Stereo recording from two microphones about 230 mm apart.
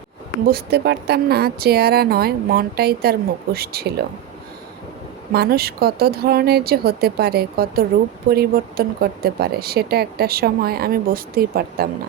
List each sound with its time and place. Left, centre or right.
0.4 s speech: right
5.3 s speech: right